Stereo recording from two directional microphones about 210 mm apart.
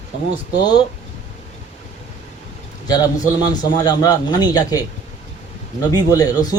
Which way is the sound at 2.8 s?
20° left (ahead or behind).